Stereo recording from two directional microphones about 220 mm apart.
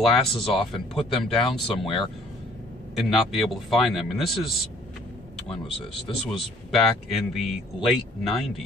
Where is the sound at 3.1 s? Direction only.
Centre (ahead or behind).